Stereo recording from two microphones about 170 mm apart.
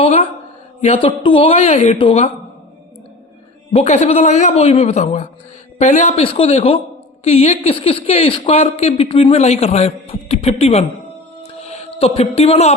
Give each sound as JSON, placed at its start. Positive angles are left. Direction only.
{"t": 0.0, "sound": "speech", "side_deg": 35}
{"t": 0.8, "sound": "speech", "side_deg": 45}
{"t": 1.0, "sound": "speech", "side_deg": 30}
{"t": 3.7, "sound": "speech", "side_deg": 40}
{"t": 11.4, "sound": "music", "side_deg": 40}